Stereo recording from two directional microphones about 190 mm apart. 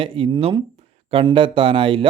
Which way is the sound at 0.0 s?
30° right (ahead or behind).